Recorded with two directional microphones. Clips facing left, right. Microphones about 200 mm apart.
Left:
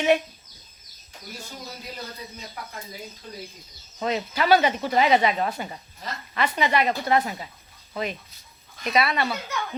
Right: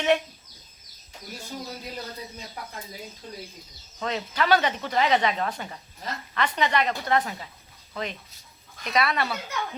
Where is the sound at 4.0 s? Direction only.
10° left (ahead or behind).